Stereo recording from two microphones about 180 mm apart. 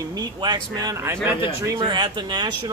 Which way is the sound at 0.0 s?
20° right (ahead or behind).